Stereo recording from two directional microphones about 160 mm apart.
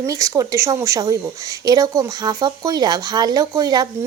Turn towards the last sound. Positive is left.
turn(degrees=-25)  # may be behind; listen again after turning